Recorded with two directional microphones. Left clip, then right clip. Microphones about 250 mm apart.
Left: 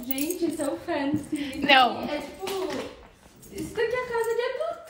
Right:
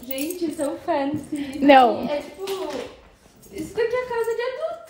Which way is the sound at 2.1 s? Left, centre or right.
Centre.